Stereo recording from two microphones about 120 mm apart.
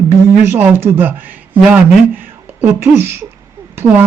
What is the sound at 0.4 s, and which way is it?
Speech, 15° right (ahead or behind).